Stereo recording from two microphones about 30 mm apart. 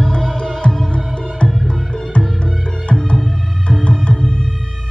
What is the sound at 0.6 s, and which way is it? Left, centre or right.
Music, left.